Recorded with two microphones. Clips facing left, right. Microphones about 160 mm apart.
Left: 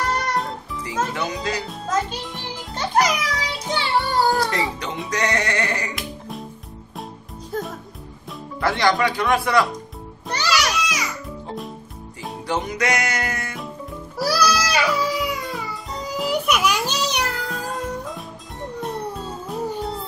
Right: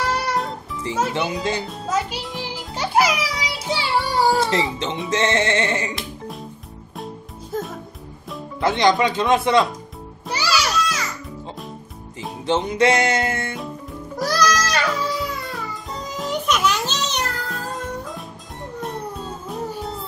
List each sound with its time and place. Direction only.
0.0 s music: 5° right (ahead or behind)
1.3 s speech: 25° right (ahead or behind)
1.7 s music: 10° right (ahead or behind)
4.4 s speech: 25° right (ahead or behind)
8.5 s speech: 20° right (ahead or behind)
10.2 s music: 5° right (ahead or behind)
10.7 s music: 10° left (ahead or behind)
12.2 s music: 25° right (ahead or behind)
14.1 s music: 10° left (ahead or behind)
17.5 s music: centre (ahead or behind)